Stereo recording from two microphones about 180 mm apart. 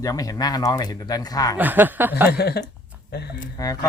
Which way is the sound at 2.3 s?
65° left (ahead or behind).